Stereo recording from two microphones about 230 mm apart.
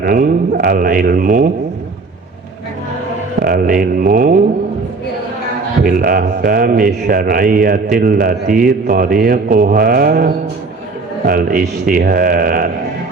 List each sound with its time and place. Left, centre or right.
0.0 s a man's voice: right
3.4 s a man's voice: right
5.8 s a man's voice: right